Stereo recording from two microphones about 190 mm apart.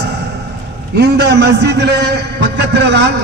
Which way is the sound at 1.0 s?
60° right (ahead or behind).